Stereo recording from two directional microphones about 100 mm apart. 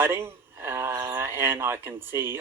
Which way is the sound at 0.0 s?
25° right (ahead or behind).